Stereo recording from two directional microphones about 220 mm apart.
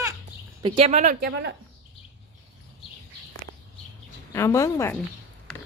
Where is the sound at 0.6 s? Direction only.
25° right (ahead or behind); by 1.5 s 45° right (ahead or behind).